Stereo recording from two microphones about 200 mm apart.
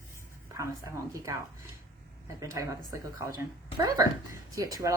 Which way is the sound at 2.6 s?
15° right (ahead or behind).